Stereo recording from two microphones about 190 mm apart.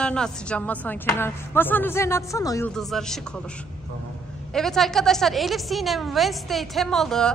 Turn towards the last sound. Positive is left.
turn(degrees=5)  # may be behind; listen again after turning